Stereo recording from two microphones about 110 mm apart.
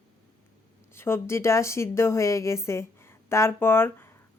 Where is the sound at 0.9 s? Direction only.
20° left (ahead or behind).